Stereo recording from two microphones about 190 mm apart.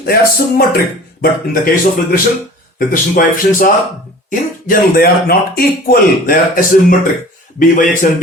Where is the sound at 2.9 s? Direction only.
45° left (ahead or behind).